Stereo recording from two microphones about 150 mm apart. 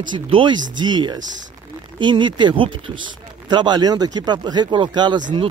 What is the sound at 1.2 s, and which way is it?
Speech, 60° right (ahead or behind).